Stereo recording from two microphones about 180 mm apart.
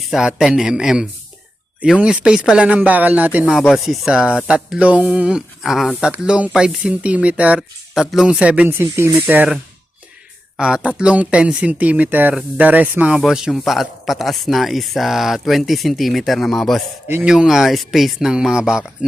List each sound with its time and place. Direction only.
0.1 s speech: 5° right (ahead or behind)
10.6 s speech: 5° right (ahead or behind)